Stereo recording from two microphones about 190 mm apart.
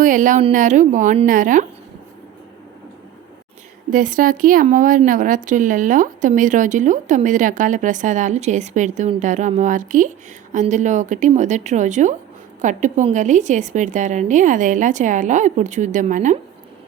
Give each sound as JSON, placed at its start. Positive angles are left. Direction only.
{"t": 0.0, "sound": "a woman's voice", "side_deg": -45}
{"t": 3.8, "sound": "speech", "side_deg": -45}